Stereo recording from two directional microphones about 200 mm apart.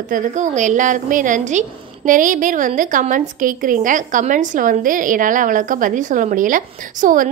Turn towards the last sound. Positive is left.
turn(degrees=-40)  # may be behind; listen again after turning